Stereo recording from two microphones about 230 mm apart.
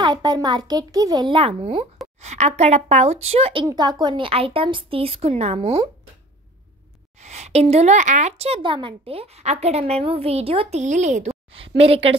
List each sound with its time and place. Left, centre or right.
0.0 s a child's voice: centre
7.2 s a woman's voice: right